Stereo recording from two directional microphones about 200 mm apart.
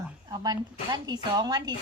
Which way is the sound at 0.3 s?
20° right (ahead or behind).